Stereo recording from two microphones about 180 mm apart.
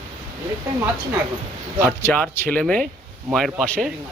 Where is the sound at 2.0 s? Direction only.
10° left (ahead or behind).